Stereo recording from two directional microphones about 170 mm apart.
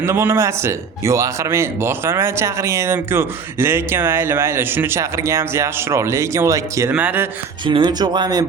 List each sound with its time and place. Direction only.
0.0 s speech: 15° right (ahead or behind)
7.6 s speech: 25° right (ahead or behind)